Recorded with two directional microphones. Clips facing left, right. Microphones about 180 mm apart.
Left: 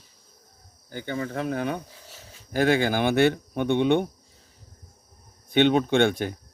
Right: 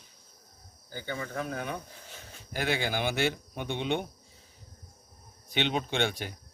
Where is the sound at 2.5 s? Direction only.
45° left (ahead or behind).